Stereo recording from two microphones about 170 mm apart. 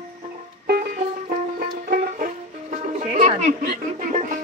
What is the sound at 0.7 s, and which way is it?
Music, 55° right (ahead or behind).